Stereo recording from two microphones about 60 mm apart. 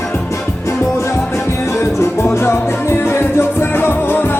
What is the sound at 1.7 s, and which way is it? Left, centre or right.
Music, left.